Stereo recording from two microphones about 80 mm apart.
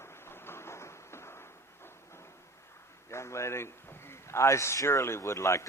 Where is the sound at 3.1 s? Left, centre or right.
Left.